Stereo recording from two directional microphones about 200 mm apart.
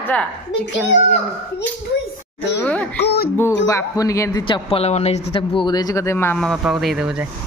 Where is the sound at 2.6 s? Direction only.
5° left (ahead or behind).